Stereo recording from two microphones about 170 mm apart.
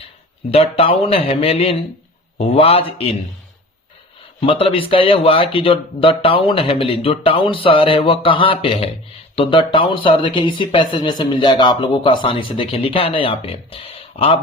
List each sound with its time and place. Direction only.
0.5 s speech: 35° left (ahead or behind)
4.4 s speech: 30° left (ahead or behind)